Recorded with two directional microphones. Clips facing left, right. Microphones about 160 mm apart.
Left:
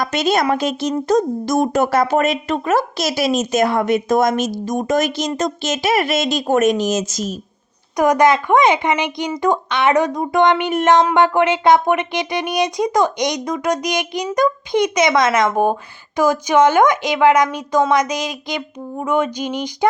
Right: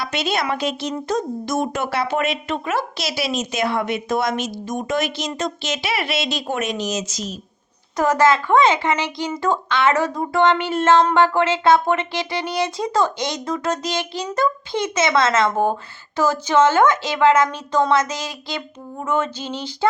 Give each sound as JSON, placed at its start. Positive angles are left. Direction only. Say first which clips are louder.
{"t": 0.0, "sound": "speech", "louder": "left 6 dB", "side_deg": 45}
{"t": 7.9, "sound": "speech", "louder": "left 3 dB", "side_deg": 15}